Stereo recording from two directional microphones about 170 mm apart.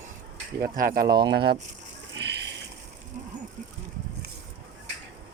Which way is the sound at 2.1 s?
85° right.